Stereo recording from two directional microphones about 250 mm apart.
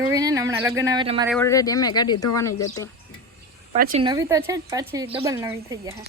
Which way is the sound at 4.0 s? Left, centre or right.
Centre.